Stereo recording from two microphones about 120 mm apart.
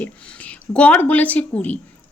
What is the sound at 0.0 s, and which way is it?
Speech, 10° left (ahead or behind).